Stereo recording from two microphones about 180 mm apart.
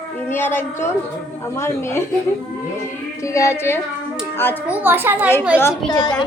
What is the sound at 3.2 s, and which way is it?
Speech, 15° left (ahead or behind).